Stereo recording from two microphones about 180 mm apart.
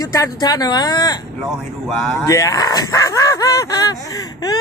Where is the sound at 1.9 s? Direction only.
Centre (ahead or behind).